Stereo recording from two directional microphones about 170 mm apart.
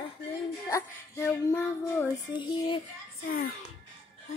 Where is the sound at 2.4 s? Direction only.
30° left (ahead or behind).